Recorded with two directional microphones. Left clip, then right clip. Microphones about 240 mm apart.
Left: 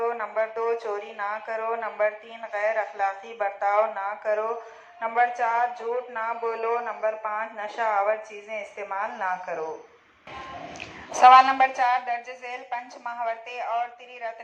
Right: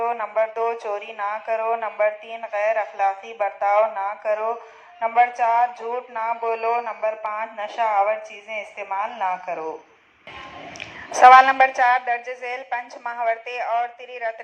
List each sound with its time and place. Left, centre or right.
0.0 s speech: right
11.1 s speech: right